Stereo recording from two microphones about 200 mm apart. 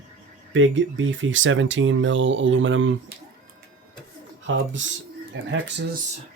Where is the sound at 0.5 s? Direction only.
70° right (ahead or behind).